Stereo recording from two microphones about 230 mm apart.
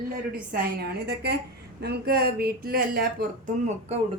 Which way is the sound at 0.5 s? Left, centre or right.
Right.